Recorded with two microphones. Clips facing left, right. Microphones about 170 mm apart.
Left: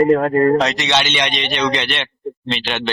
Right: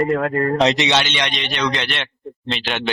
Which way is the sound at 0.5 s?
20° right (ahead or behind).